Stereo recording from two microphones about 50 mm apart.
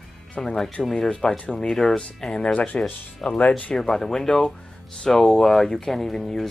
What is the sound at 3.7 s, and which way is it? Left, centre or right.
Speech, centre.